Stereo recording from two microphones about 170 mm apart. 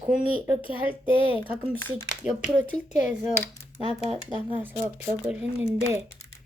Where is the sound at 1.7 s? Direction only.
15° left (ahead or behind).